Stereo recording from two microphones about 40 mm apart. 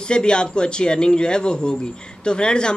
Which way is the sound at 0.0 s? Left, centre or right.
Left.